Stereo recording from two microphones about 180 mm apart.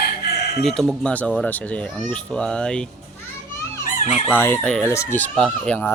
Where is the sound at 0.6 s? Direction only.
5° left (ahead or behind).